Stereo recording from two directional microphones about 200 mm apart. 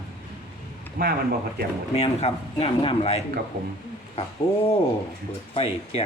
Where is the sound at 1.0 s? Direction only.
45° right (ahead or behind).